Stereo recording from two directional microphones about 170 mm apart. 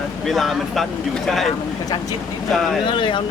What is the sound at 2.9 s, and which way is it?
Speech, 30° left (ahead or behind).